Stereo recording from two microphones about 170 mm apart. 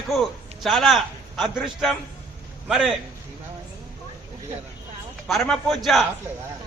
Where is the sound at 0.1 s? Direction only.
Centre (ahead or behind).